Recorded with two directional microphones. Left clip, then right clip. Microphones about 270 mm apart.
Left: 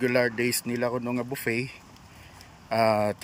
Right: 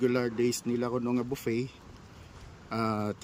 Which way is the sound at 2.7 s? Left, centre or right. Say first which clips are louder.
Left 9 dB; centre.